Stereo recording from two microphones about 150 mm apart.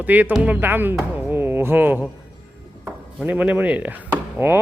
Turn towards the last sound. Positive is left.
turn(degrees=-15)  # may be behind; listen again after turning